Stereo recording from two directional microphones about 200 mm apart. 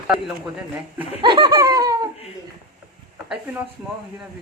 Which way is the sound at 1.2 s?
25° right (ahead or behind).